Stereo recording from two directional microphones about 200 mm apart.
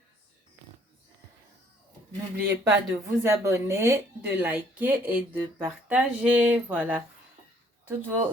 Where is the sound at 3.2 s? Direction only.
15° right (ahead or behind).